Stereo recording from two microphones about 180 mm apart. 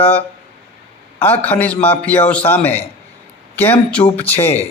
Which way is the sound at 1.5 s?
10° left (ahead or behind).